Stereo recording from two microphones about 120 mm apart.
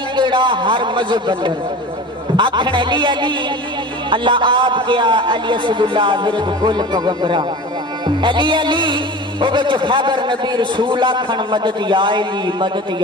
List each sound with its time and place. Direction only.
0.1 s a man's voice: 40° right (ahead or behind)